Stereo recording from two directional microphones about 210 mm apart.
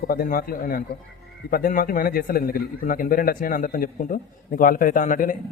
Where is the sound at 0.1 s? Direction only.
45° left (ahead or behind).